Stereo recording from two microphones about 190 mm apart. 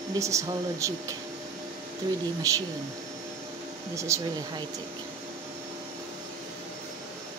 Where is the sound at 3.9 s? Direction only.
15° right (ahead or behind).